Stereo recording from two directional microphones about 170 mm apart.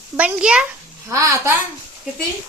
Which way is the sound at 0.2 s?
5° right (ahead or behind).